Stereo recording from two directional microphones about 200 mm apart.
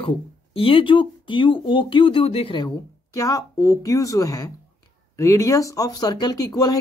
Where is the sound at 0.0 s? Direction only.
30° left (ahead or behind).